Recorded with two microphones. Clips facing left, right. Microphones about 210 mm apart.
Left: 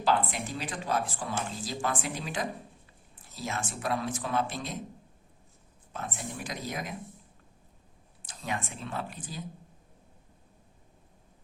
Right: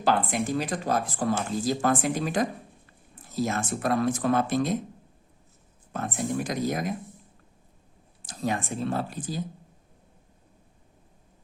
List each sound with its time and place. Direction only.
0.0 s speech: 45° right (ahead or behind)
5.9 s speech: 50° right (ahead or behind)
8.3 s speech: 35° right (ahead or behind)